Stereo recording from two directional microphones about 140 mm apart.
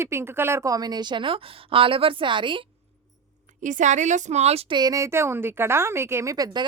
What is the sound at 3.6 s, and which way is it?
A woman's voice, 60° right (ahead or behind).